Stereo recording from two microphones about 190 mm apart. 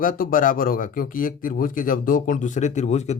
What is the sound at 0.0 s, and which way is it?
Speech, 45° left (ahead or behind).